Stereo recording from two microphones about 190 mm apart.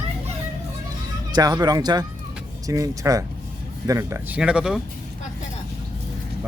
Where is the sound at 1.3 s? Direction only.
20° right (ahead or behind); by 4.8 s 5° right (ahead or behind).